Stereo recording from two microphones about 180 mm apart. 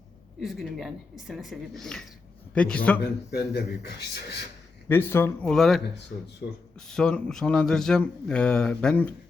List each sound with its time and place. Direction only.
0.3 s speech: centre (ahead or behind)
3.0 s a man's voice: 65° left (ahead or behind)
4.9 s speech: 15° left (ahead or behind)